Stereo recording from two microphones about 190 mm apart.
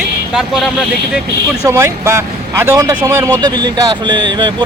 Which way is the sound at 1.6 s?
15° right (ahead or behind).